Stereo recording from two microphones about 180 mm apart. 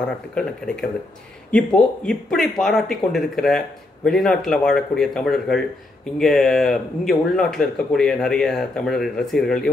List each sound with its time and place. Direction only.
0.3 s speech: 5° left (ahead or behind)